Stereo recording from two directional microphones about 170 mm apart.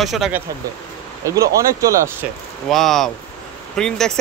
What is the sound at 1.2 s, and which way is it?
Speech, 20° right (ahead or behind).